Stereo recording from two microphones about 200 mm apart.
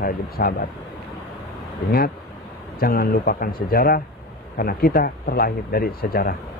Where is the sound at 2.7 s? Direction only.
50° left (ahead or behind).